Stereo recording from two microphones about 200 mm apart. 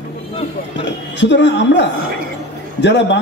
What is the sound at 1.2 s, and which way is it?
A man's voice, 60° left (ahead or behind).